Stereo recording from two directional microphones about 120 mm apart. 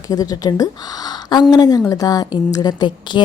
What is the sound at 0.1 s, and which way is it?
A woman's voice, 30° left (ahead or behind).